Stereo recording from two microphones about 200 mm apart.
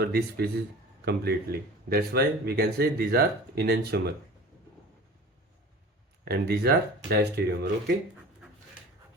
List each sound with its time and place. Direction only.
0.0 s speech: 55° right (ahead or behind)
6.2 s speech: 50° right (ahead or behind)